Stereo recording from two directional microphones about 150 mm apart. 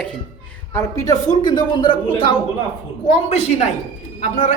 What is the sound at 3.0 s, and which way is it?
Speech, 45° left (ahead or behind).